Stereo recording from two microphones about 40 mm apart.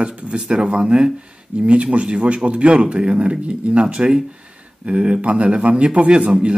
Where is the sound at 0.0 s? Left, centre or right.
Right.